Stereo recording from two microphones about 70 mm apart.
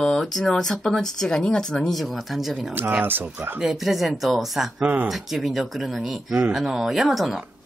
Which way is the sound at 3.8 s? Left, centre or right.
Centre.